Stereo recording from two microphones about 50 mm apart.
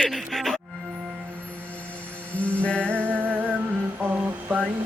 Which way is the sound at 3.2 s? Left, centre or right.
Right.